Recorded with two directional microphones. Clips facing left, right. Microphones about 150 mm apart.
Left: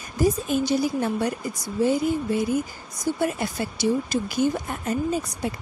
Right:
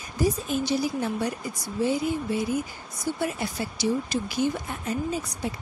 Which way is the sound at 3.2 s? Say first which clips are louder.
Left 3 dB; 50° left (ahead or behind).